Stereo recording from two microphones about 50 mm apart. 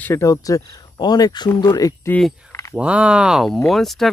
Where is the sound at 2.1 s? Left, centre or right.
Left.